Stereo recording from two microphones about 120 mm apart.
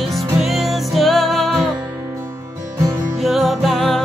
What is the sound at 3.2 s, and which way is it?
Music, centre (ahead or behind).